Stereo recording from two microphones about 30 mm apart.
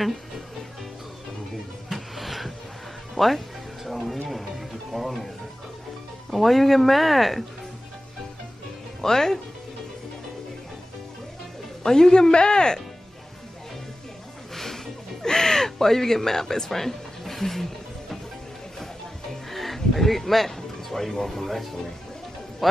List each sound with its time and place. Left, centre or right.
1.9 s music: centre
6.3 s speech: centre
9.0 s speech: centre
11.8 s speech: left
14.5 s music: centre
15.2 s speech: centre
19.5 s speech: centre